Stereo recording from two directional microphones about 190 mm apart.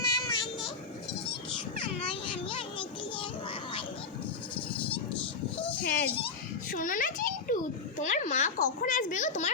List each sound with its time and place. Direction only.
0.0 s child singing: 20° left (ahead or behind)
2.0 s a sound: 25° left (ahead or behind)
5.8 s goat: 50° left (ahead or behind)
6.7 s a child's voice: 45° left (ahead or behind)